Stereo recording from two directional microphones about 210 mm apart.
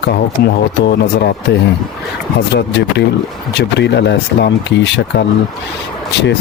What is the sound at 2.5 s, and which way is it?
Speech, 55° left (ahead or behind).